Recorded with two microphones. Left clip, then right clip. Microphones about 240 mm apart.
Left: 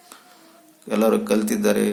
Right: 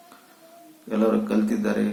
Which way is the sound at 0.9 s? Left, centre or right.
Left.